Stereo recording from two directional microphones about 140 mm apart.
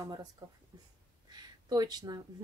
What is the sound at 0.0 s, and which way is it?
Speech, 25° right (ahead or behind).